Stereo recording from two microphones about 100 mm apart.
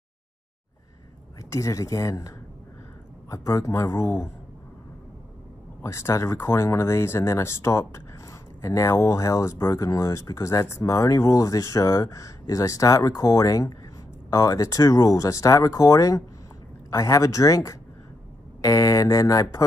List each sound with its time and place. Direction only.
1.5 s speech: 30° left (ahead or behind)
5.8 s speech: 30° left (ahead or behind)